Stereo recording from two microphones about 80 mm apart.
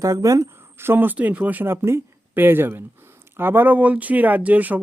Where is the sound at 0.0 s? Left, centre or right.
Right.